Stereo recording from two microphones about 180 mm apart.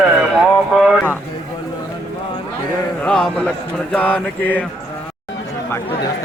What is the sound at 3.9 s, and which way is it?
Speech, 5° left (ahead or behind).